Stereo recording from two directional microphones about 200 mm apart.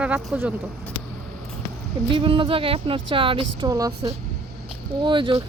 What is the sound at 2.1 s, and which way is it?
Speech, 25° right (ahead or behind).